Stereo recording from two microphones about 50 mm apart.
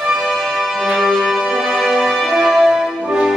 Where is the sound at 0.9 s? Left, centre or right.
Centre.